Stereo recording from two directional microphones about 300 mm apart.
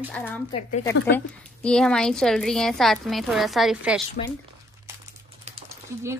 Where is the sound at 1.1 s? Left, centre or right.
Centre.